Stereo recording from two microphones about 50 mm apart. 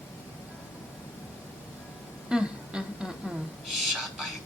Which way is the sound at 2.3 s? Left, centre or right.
Centre.